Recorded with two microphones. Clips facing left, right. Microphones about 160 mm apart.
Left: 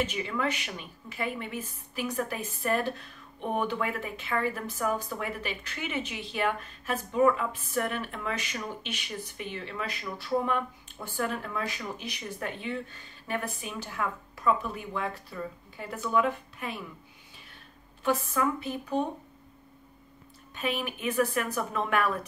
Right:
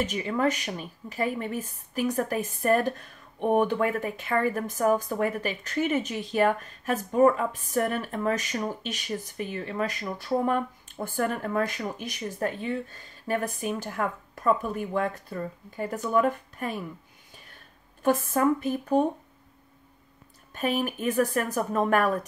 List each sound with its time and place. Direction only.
0.0 s a woman's voice: 45° right (ahead or behind)
18.0 s a woman's voice: 50° right (ahead or behind)
20.5 s a woman's voice: 45° right (ahead or behind)